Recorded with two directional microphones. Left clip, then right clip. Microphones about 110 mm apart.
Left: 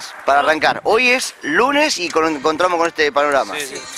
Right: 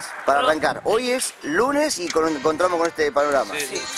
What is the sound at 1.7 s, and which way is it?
Speech, 40° left (ahead or behind).